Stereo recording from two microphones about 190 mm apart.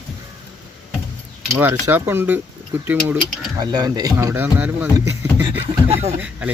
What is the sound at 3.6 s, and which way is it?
A man's voice, 20° right (ahead or behind).